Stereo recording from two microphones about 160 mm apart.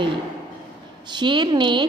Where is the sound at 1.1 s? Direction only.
30° right (ahead or behind).